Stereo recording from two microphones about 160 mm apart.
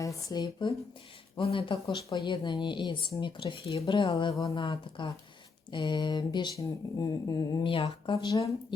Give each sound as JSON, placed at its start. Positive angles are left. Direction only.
{"t": 0.0, "sound": "speech", "side_deg": 20}